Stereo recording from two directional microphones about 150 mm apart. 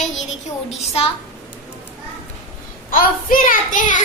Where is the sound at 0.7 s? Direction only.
40° left (ahead or behind).